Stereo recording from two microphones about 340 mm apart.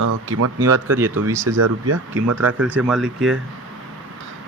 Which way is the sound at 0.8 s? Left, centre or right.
Centre.